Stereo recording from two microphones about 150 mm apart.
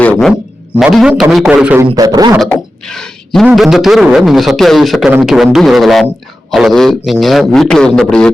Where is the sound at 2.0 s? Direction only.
25° right (ahead or behind).